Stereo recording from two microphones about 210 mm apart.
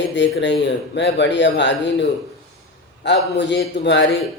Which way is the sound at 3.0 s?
55° left (ahead or behind).